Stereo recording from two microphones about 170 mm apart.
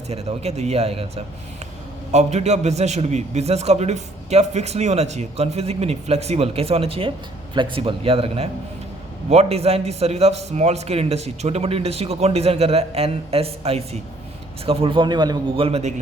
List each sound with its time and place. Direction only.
0.1 s a man's voice: 35° right (ahead or behind)